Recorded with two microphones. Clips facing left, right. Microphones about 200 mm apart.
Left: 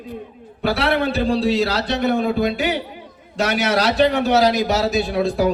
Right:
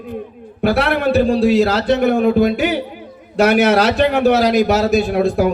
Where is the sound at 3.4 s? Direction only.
55° right (ahead or behind).